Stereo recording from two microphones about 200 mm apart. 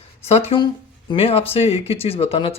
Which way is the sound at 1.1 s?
30° left (ahead or behind).